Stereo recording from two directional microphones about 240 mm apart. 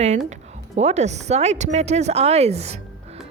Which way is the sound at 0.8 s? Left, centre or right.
Right.